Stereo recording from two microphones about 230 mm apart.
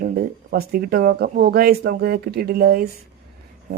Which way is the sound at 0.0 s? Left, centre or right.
Right.